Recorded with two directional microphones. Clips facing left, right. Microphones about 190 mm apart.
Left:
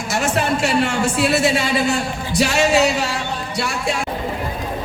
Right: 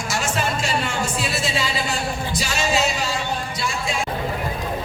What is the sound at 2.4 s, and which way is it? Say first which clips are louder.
Music: left 8 dB; 65° left (ahead or behind).